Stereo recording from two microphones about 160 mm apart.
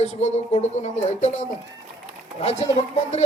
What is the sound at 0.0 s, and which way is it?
A man's voice, 45° left (ahead or behind).